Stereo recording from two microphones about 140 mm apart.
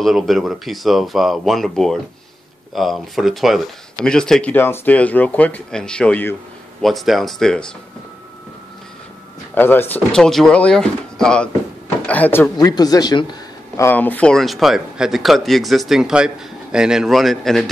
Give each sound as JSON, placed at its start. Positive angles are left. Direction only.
{"t": 0.0, "sound": "speech", "side_deg": 0}
{"t": 9.6, "sound": "speech", "side_deg": 15}
{"t": 12.5, "sound": "speech", "side_deg": 30}
{"t": 13.7, "sound": "speech", "side_deg": 15}